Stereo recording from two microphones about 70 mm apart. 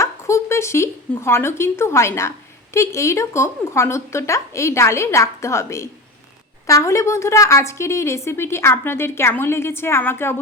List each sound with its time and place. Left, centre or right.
0.0 s a woman's voice: left